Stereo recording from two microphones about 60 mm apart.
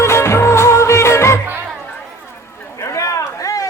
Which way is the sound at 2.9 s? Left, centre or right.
Left.